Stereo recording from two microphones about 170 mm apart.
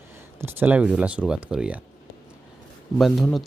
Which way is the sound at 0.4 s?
10° right (ahead or behind).